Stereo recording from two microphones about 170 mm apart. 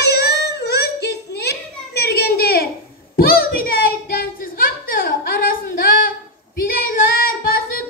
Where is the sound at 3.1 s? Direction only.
60° left (ahead or behind).